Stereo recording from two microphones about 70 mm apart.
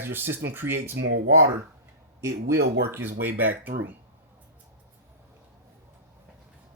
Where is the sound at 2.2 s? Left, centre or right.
Right.